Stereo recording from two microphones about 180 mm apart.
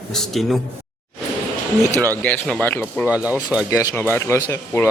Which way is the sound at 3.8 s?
15° left (ahead or behind).